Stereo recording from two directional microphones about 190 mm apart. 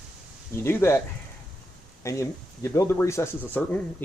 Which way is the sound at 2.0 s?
15° left (ahead or behind).